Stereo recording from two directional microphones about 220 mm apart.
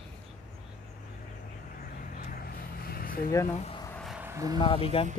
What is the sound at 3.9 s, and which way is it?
Vehicle, centre (ahead or behind).